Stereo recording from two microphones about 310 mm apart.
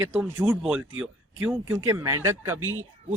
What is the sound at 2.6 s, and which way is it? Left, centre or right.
Speech, right.